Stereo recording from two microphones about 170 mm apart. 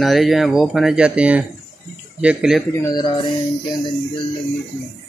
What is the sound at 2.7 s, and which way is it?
Speech, 25° left (ahead or behind).